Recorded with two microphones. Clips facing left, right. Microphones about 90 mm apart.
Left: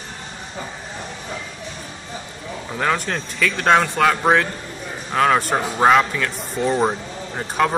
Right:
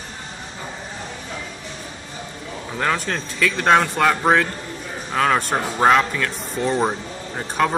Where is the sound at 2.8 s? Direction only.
Centre (ahead or behind).